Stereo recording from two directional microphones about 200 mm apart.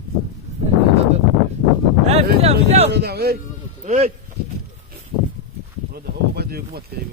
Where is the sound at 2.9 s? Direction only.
55° right (ahead or behind).